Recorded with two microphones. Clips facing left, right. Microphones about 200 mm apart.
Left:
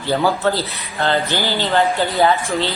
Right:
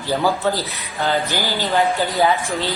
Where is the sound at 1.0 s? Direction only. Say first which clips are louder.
Left 2 dB; 15° right (ahead or behind).